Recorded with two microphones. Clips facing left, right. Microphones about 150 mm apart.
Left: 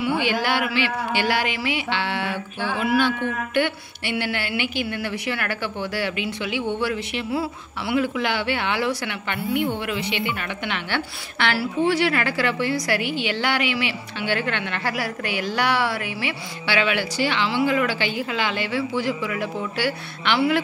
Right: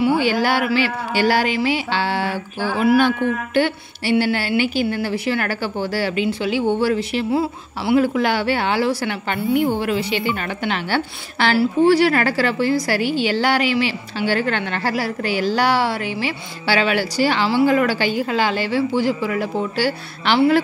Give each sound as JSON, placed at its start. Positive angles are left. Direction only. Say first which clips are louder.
{"t": 0.2, "sound": "a woman's voice", "louder": "right 4 dB", "side_deg": -40}
{"t": 2.2, "sound": "a sound", "louder": "right 4 dB", "side_deg": -5}
{"t": 3.5, "sound": "a woman's voice", "louder": "right 4 dB", "side_deg": -35}